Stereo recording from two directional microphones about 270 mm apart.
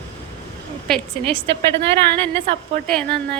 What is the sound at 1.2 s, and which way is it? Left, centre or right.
Speech, right.